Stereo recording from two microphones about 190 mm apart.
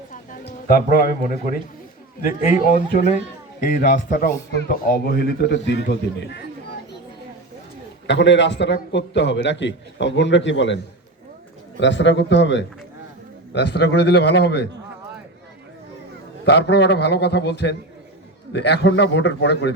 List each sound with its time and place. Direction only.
0.1 s a sound: 50° left (ahead or behind)
2.2 s speech: 45° left (ahead or behind); by 6.4 s 65° left (ahead or behind)
8.0 s a man's voice: 70° left (ahead or behind)
11.8 s a man's voice: 70° left (ahead or behind)
16.5 s a man's voice: 65° left (ahead or behind)